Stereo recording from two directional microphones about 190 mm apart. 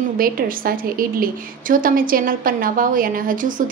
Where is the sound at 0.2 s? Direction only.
50° right (ahead or behind).